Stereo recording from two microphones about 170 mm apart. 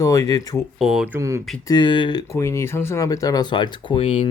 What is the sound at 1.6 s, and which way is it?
Speech, 25° left (ahead or behind).